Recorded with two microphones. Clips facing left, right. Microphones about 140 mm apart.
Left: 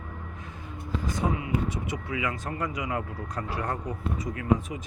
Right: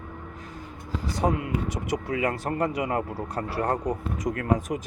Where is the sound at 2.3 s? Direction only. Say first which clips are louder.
Right 6 dB; 65° right (ahead or behind).